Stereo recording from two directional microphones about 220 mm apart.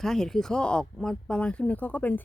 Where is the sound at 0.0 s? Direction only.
Centre (ahead or behind).